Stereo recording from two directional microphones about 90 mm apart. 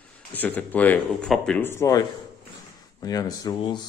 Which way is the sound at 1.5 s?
25° left (ahead or behind).